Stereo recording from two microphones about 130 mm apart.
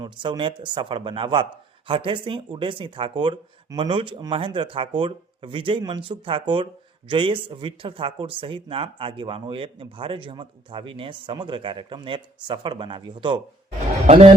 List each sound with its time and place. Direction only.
0.0 s speech: 40° right (ahead or behind)